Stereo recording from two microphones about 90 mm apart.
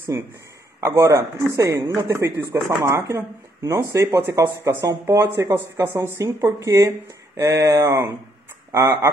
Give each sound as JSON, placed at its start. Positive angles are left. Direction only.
{"t": 0.7, "sound": "speech", "side_deg": -35}